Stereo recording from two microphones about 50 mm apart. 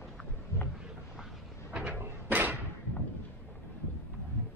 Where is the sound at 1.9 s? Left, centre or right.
Right.